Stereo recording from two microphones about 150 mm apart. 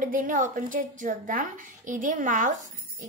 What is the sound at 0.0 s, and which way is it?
A woman's voice, 65° right (ahead or behind).